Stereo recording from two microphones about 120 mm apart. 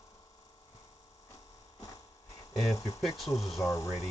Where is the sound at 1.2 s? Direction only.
25° left (ahead or behind).